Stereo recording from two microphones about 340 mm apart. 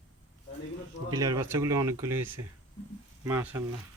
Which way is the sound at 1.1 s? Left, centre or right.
Centre.